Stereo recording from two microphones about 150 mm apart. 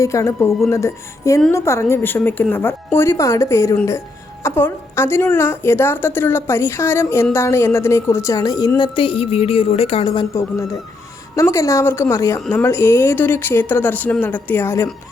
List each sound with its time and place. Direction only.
0.0 s a woman's voice: 20° left (ahead or behind); by 10.2 s 35° left (ahead or behind)
11.3 s a woman's voice: 20° left (ahead or behind)